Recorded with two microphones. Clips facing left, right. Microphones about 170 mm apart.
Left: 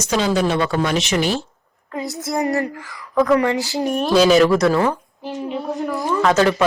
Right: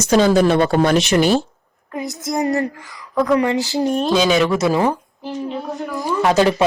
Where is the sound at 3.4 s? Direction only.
20° right (ahead or behind).